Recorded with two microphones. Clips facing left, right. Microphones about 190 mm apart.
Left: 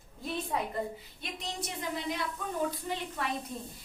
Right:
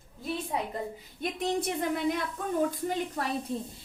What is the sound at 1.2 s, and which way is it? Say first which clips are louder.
A woman's voice: right 11 dB; 55° right (ahead or behind).